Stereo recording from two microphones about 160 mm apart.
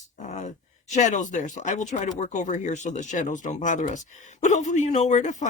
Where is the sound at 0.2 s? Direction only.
50° left (ahead or behind).